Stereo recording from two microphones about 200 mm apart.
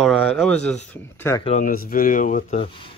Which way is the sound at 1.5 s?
40° left (ahead or behind).